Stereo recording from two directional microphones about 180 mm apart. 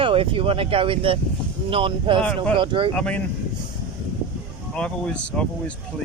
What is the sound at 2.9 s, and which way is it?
Speech, 5° left (ahead or behind).